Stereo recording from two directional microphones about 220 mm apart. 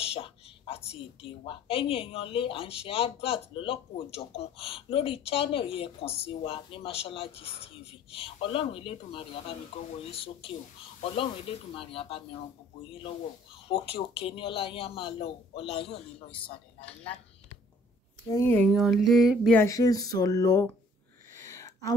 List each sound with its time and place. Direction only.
0.0 s a woman's voice: 25° left (ahead or behind)
18.3 s speech: 10° left (ahead or behind)
19.6 s speech: 15° left (ahead or behind)